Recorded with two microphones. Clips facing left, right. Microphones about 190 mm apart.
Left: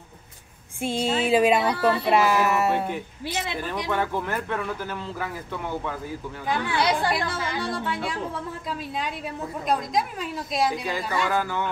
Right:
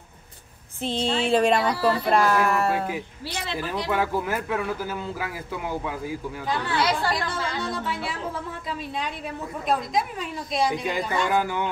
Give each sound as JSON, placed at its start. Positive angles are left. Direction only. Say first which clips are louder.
{"t": 0.7, "sound": "speech", "louder": "left 1 dB", "side_deg": 10}
{"t": 3.4, "sound": "speech", "louder": "right 1 dB", "side_deg": 15}
{"t": 3.9, "sound": "speech", "louder": "right 2 dB", "side_deg": -10}
{"t": 6.5, "sound": "speech", "louder": "left 1 dB", "side_deg": 10}
{"t": 7.7, "sound": "speech", "louder": "left 1 dB", "side_deg": 0}
{"t": 10.7, "sound": "a woman's voice", "louder": "right 2 dB", "side_deg": -20}